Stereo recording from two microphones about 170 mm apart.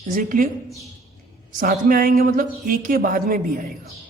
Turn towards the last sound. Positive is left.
turn(degrees=-55)  # may be behind; listen again after turning